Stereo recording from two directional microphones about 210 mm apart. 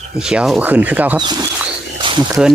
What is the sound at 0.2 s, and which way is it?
Speech, 5° right (ahead or behind).